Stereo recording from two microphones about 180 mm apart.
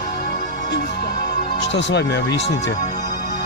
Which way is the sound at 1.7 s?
70° left (ahead or behind).